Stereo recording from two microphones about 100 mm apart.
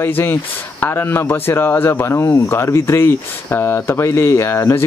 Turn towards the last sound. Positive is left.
turn(degrees=30)  # may be behind; listen again after turning